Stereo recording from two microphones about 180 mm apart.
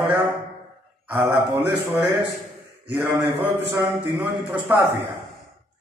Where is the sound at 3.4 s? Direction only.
25° right (ahead or behind).